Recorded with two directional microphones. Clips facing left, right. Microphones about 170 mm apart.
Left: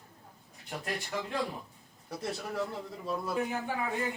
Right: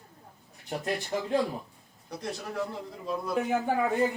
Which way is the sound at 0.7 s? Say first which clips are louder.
Right 6 dB; 30° right (ahead or behind).